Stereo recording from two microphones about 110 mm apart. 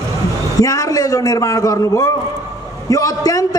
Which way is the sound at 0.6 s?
35° left (ahead or behind).